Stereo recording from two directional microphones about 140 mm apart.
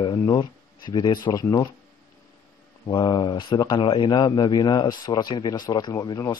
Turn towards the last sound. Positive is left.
turn(degrees=30)  # may be behind; listen again after turning